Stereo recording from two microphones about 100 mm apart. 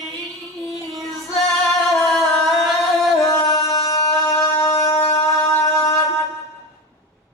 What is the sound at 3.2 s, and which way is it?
Music, 40° left (ahead or behind).